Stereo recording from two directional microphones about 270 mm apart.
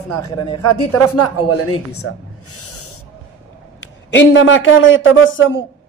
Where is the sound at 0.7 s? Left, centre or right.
Left.